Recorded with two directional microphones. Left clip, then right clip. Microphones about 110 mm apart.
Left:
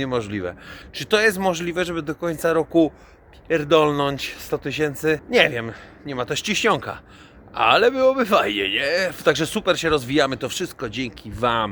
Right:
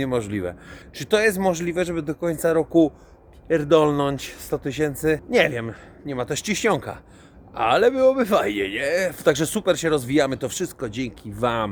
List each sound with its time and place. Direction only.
0.0 s speech: 35° right (ahead or behind)